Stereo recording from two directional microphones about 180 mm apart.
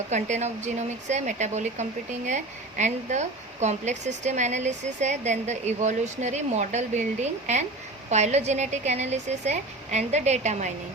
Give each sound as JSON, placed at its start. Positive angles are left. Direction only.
{"t": 0.1, "sound": "speech", "side_deg": -40}